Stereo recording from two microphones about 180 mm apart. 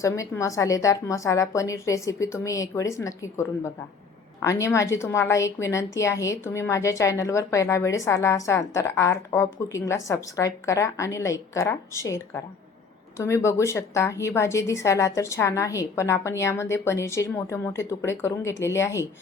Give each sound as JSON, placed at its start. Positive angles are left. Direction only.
{"t": 0.0, "sound": "a woman's voice", "side_deg": 15}